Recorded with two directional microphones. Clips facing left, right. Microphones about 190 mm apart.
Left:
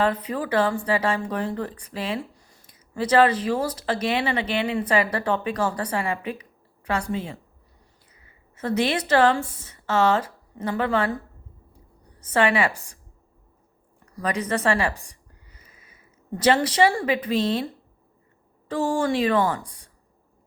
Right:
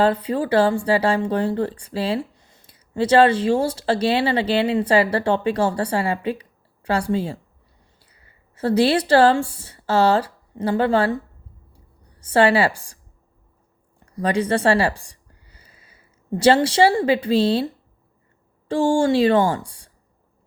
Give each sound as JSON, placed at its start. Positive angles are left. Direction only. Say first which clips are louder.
{"t": 0.0, "sound": "speech", "louder": "right 5 dB", "side_deg": -30}
{"t": 12.2, "sound": "speech", "louder": "right 5 dB", "side_deg": -30}
{"t": 14.0, "sound": "speech", "louder": "right 6 dB", "side_deg": -30}
{"t": 18.7, "sound": "a woman's voice", "louder": "right 5 dB", "side_deg": -30}